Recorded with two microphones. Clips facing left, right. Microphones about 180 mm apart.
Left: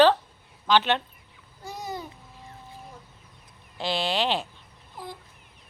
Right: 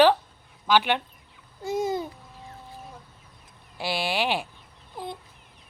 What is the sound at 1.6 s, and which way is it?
Babbling, 25° right (ahead or behind).